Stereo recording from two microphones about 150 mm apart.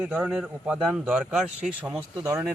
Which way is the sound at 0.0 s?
10° right (ahead or behind).